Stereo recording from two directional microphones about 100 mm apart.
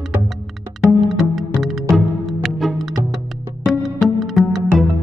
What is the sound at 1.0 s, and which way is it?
Music, centre (ahead or behind).